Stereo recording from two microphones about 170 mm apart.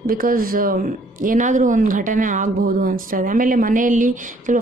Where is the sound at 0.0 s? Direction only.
55° right (ahead or behind).